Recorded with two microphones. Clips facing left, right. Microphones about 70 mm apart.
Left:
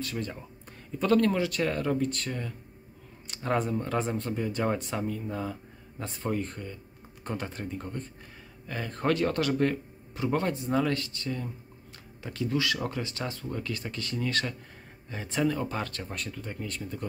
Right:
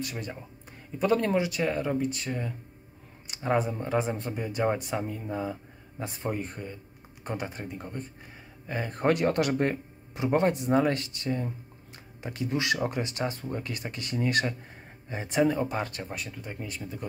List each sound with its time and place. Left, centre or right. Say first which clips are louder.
0.0 s speech: left 1 dB; centre